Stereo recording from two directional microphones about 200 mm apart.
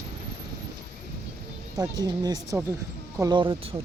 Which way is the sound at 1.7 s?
20° right (ahead or behind).